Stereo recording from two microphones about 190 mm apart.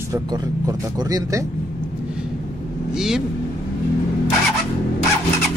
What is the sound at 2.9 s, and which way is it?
Speech, 5° right (ahead or behind).